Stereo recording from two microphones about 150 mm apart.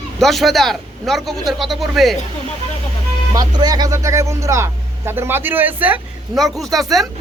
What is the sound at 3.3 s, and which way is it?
Speech, 25° right (ahead or behind).